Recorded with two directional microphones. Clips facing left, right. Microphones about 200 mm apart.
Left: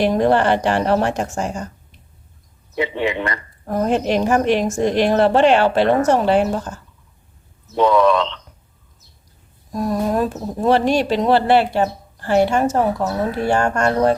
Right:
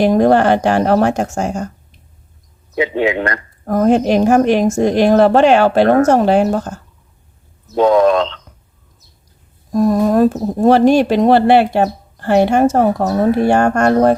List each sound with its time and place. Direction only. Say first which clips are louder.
0.0 s speech: right 5 dB; 45° right (ahead or behind)
2.9 s speech: right 5 dB; 45° right (ahead or behind)
7.9 s speech: right 4 dB; 45° right (ahead or behind)
9.7 s speech: right 7 dB; 45° right (ahead or behind)